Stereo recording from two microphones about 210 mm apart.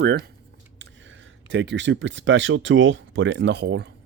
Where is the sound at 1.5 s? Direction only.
60° right (ahead or behind).